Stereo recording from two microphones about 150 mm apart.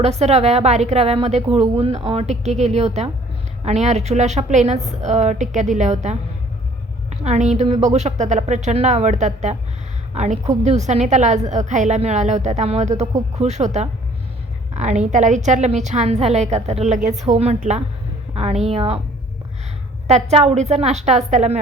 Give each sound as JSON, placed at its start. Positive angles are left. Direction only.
{"t": 0.0, "sound": "a woman's voice", "side_deg": -45}
{"t": 20.1, "sound": "a woman's voice", "side_deg": -45}